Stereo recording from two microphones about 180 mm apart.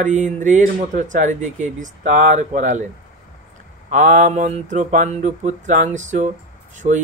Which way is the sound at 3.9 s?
45° right (ahead or behind).